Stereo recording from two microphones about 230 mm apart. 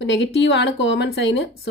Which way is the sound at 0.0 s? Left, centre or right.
Left.